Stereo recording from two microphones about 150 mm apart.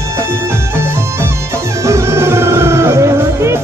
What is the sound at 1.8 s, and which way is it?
Music, 20° right (ahead or behind).